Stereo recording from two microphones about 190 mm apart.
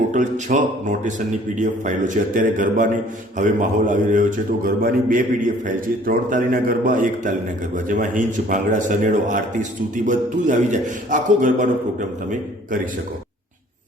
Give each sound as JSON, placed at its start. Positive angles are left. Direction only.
{"t": 0.1, "sound": "a man's voice", "side_deg": -40}